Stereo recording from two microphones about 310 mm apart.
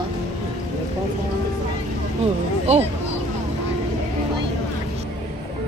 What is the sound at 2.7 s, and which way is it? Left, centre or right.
Speech, right.